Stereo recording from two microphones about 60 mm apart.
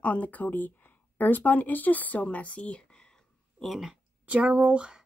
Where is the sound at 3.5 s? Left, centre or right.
Centre.